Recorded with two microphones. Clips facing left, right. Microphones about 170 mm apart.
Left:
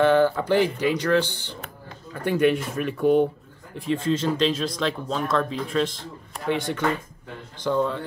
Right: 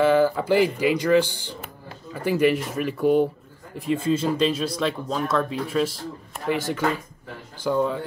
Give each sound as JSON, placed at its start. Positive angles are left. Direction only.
{"t": 0.0, "sound": "speech", "side_deg": -5}